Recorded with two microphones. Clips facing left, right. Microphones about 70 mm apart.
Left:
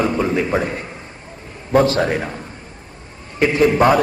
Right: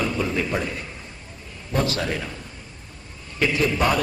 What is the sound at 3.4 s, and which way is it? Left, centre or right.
Speech, left.